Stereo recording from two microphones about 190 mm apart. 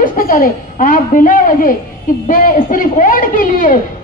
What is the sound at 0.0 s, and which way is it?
A woman's voice, 45° left (ahead or behind).